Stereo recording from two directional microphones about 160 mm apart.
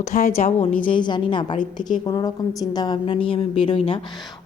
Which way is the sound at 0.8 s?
30° left (ahead or behind).